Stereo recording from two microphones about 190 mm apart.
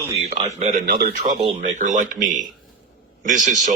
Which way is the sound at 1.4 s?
40° right (ahead or behind).